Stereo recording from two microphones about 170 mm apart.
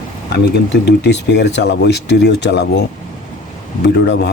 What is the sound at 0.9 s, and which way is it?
Speech, 85° left.